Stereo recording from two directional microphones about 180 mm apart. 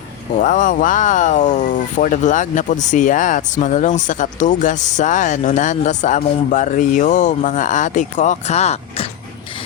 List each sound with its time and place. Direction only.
0.3 s speech: 45° left (ahead or behind)